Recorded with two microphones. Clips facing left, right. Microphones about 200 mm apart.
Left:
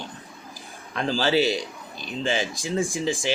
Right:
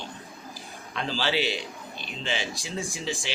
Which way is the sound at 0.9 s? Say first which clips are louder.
Left 6 dB; 45° left (ahead or behind).